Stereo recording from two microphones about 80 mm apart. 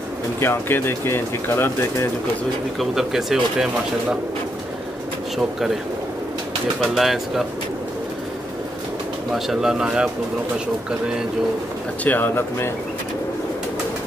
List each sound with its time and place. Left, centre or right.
0.4 s speech: left
2.8 s speech: centre
6.8 s speech: centre
9.3 s speech: centre
12.0 s speech: left